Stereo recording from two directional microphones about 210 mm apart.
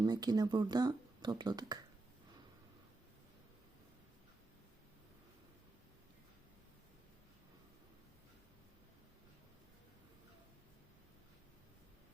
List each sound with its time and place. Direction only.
0.0 s speech: 20° right (ahead or behind)